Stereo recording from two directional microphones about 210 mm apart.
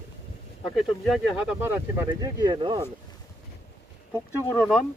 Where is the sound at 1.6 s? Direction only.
15° right (ahead or behind).